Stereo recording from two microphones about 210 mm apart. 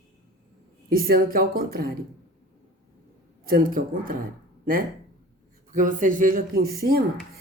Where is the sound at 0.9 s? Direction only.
45° right (ahead or behind).